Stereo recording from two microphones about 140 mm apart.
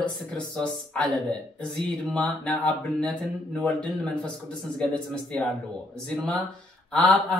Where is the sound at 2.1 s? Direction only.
10° left (ahead or behind).